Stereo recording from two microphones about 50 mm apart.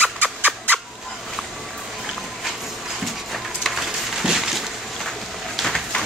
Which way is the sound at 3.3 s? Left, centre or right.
Centre.